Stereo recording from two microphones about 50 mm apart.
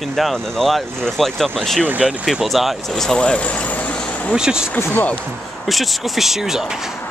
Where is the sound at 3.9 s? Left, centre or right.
Centre.